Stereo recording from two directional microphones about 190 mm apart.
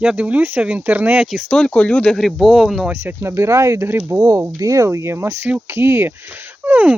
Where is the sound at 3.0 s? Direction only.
15° right (ahead or behind).